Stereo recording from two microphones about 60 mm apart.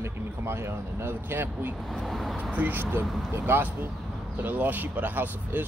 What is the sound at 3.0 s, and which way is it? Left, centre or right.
Speech, centre.